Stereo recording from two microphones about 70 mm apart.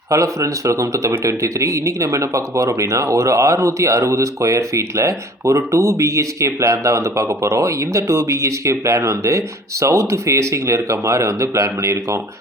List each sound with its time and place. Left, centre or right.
0.1 s speech: right